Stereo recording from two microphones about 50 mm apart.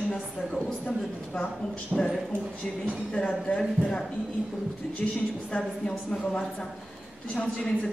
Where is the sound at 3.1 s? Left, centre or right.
Left.